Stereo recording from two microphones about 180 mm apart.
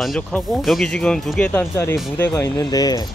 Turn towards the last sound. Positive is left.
turn(degrees=20)  # may be behind; listen again after turning